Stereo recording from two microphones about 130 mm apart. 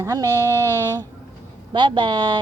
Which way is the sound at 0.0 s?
25° right (ahead or behind).